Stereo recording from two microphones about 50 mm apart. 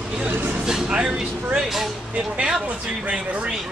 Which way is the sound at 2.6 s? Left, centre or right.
Right.